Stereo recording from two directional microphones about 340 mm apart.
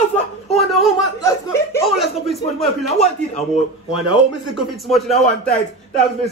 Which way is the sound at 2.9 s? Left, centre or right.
Centre.